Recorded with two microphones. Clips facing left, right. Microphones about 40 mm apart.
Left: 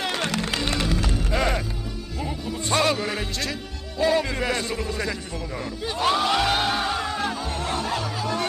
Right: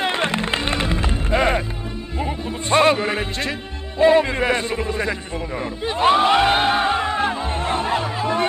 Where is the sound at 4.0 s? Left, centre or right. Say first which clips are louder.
Right 7 dB; right.